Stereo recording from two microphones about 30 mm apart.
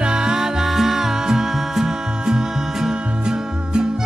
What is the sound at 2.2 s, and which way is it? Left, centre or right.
Music, right.